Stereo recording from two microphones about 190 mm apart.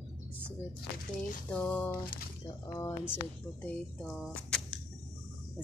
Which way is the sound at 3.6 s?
5° left (ahead or behind).